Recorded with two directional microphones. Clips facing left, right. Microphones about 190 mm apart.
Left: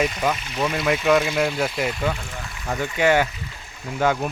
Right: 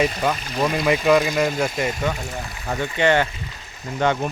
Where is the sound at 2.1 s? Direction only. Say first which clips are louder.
Right 4 dB; 40° right (ahead or behind).